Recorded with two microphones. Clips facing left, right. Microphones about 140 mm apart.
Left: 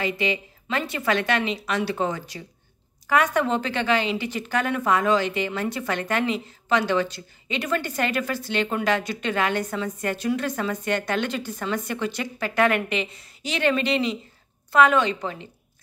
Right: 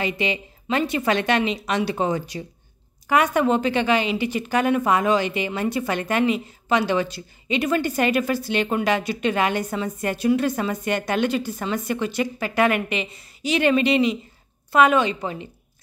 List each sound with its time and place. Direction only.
0.0 s a woman's voice: 20° right (ahead or behind)